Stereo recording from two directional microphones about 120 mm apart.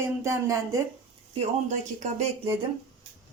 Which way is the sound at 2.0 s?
70° right (ahead or behind).